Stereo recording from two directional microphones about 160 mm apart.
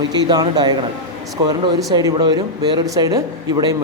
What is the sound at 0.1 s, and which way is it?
Speech, 25° right (ahead or behind).